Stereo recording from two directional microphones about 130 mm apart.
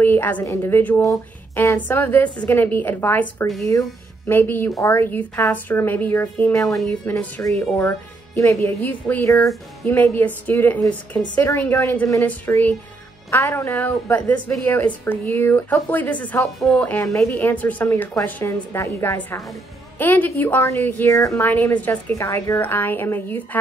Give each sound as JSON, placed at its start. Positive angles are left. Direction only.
{"t": 0.0, "sound": "a woman's voice", "side_deg": 15}
{"t": 9.3, "sound": "speech", "side_deg": 25}
{"t": 9.9, "sound": "a woman's voice", "side_deg": 15}